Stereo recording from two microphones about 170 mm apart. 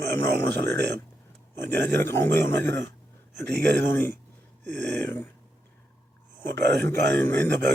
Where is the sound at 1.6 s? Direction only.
15° left (ahead or behind).